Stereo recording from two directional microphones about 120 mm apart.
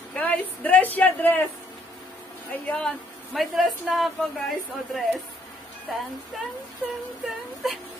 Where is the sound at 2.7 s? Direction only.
Centre (ahead or behind).